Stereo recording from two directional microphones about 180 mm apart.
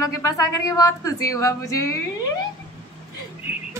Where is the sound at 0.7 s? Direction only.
20° left (ahead or behind).